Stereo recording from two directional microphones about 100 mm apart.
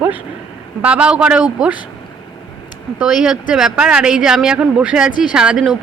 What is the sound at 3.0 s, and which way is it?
Speech, 5° right (ahead or behind).